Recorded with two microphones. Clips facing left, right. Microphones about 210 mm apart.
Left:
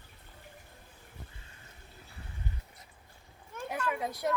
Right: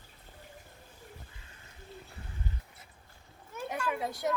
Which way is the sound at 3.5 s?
5° right (ahead or behind).